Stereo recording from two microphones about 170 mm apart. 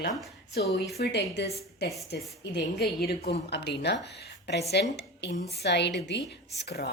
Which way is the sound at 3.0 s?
65° left (ahead or behind).